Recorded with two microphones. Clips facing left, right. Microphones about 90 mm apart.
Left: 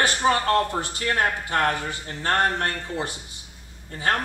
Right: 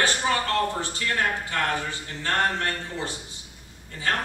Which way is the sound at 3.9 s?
50° left (ahead or behind).